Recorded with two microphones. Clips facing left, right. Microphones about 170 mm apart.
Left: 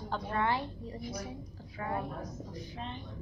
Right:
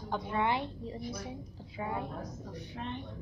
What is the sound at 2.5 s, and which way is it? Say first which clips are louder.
Speech: right 4 dB; 65° right (ahead or behind).